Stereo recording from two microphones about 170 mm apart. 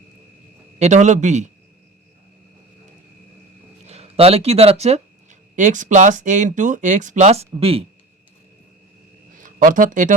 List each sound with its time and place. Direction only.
0.8 s a man's voice: 45° right (ahead or behind)
3.8 s speech: 40° right (ahead or behind)
9.4 s speech: 50° right (ahead or behind)